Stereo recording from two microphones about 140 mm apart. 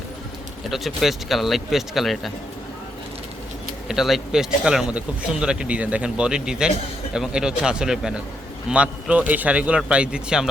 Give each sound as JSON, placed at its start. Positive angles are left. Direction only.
{"t": 0.6, "sound": "speech", "side_deg": 0}
{"t": 3.8, "sound": "a man's voice", "side_deg": 0}